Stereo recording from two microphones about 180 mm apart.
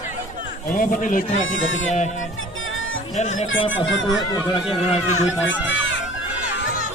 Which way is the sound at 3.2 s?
40° left (ahead or behind).